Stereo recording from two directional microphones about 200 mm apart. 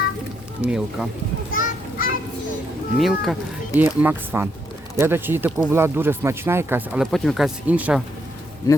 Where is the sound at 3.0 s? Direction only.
Centre (ahead or behind).